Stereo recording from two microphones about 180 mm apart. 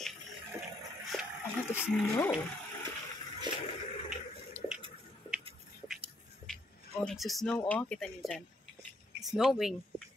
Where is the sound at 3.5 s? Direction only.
25° right (ahead or behind).